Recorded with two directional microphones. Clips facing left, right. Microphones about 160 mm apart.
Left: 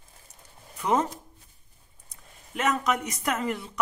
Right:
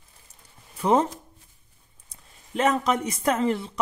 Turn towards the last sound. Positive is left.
turn(degrees=-30)  # may be behind; listen again after turning